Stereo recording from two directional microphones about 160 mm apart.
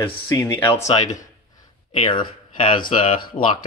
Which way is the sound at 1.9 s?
35° left (ahead or behind).